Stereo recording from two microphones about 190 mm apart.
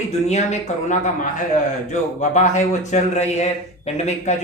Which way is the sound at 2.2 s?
40° left (ahead or behind).